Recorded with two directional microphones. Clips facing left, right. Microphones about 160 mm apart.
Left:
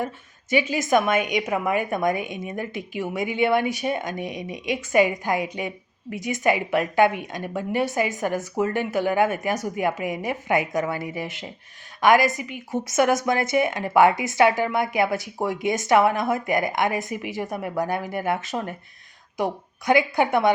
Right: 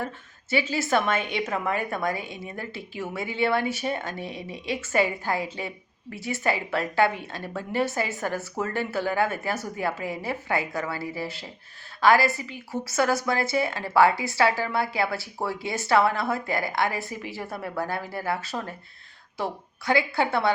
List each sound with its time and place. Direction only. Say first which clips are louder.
0.5 s a woman's voice: left 4 dB; 15° left (ahead or behind)